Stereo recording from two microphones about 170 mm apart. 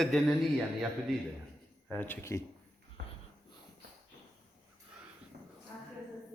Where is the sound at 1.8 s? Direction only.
10° left (ahead or behind).